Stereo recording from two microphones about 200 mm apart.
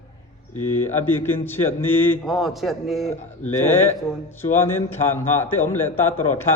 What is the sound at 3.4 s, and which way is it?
A man's voice, 10° left (ahead or behind).